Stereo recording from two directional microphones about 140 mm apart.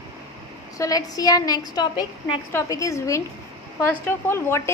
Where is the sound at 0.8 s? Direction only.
25° left (ahead or behind).